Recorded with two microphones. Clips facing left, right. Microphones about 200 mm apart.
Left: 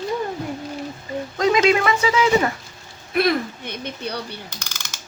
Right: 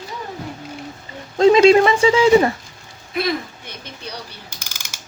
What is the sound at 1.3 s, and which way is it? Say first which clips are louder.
Speech: right 7 dB; 30° right (ahead or behind).